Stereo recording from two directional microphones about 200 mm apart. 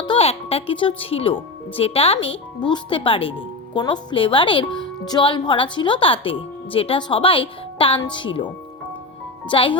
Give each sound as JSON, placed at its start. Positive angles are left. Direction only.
{"t": 0.0, "sound": "speech", "side_deg": 25}
{"t": 9.5, "sound": "speech", "side_deg": 25}